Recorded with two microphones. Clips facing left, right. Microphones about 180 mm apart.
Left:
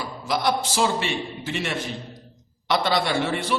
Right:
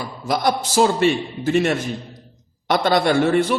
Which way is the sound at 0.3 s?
45° right (ahead or behind).